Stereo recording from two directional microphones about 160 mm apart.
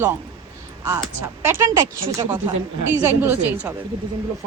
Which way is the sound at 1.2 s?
20° right (ahead or behind).